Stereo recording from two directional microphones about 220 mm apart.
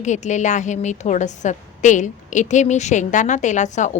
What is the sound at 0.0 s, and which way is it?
A woman's voice, 35° left (ahead or behind).